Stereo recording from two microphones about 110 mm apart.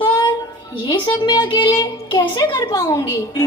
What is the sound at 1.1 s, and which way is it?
A man's voice, 35° left (ahead or behind).